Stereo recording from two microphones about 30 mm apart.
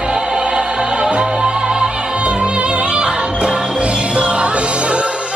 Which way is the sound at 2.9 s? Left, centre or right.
Right.